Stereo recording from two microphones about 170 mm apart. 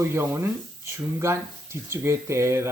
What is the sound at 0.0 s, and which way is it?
Speech, 15° right (ahead or behind).